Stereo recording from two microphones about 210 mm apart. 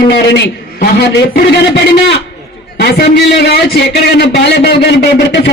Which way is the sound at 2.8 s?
50° left (ahead or behind).